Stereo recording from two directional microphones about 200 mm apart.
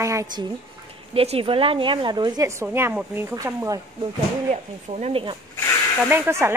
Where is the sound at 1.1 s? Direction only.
30° right (ahead or behind).